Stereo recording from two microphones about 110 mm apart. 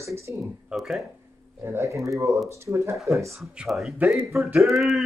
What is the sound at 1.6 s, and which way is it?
Speech, 25° right (ahead or behind).